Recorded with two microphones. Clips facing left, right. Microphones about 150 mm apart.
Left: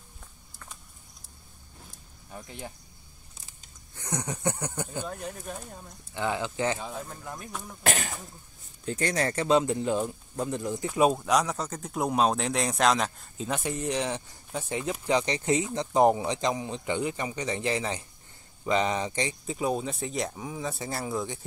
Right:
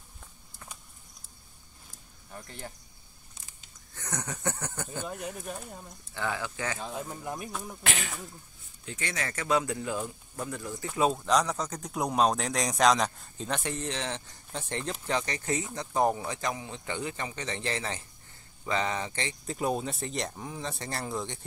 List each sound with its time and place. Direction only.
2.3 s speech: 10° left (ahead or behind)
3.9 s speech: 15° left (ahead or behind)
5.0 s speech: 5° right (ahead or behind)
6.1 s speech: 20° left (ahead or behind)
7.0 s speech: 15° right (ahead or behind)
7.8 s speech: 40° left (ahead or behind); by 19.3 s 15° left (ahead or behind)
19.4 s speech: 5° left (ahead or behind)